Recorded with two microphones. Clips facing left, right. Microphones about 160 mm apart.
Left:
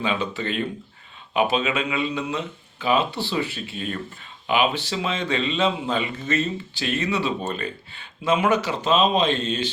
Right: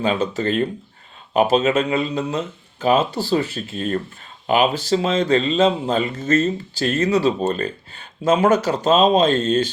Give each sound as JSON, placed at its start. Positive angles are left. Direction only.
{"t": 0.0, "sound": "speech", "side_deg": -40}